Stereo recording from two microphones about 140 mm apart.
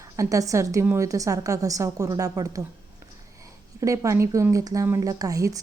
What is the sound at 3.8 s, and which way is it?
A woman's voice, 20° right (ahead or behind).